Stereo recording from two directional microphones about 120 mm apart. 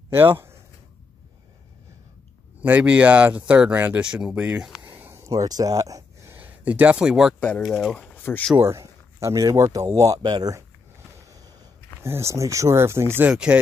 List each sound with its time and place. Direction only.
0.1 s speech: 20° right (ahead or behind)
2.6 s speech: 10° right (ahead or behind)
5.1 s speech: 30° right (ahead or behind); by 7.3 s 5° right (ahead or behind)
7.3 s speech: 10° left (ahead or behind)
7.6 s speech: centre (ahead or behind)
8.1 s a sound: 15° left (ahead or behind)
8.5 s speech: 25° right (ahead or behind)
11.1 s a sound: 30° right (ahead or behind)
12.0 s speech: 20° right (ahead or behind)
13.3 s speech: 5° right (ahead or behind)